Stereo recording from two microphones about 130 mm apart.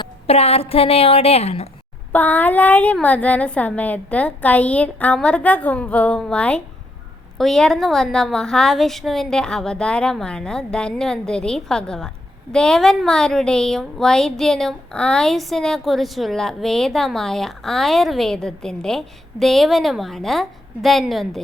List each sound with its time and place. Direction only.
0.3 s a woman's voice: 50° left (ahead or behind)
2.1 s a woman's voice: 15° left (ahead or behind)